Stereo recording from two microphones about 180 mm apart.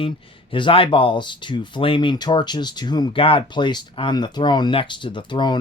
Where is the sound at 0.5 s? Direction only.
30° left (ahead or behind).